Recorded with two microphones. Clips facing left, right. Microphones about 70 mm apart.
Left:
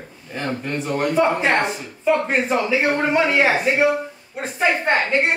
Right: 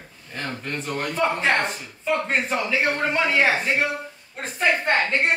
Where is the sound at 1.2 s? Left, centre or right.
Left.